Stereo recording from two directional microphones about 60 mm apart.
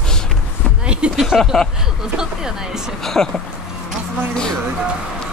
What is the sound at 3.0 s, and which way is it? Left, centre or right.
Speech, centre.